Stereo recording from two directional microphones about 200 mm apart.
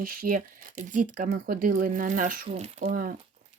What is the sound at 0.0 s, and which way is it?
Speech, 45° right (ahead or behind).